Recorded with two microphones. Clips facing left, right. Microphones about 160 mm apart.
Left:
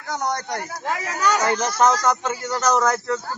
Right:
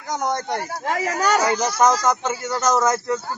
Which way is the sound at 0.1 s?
20° right (ahead or behind).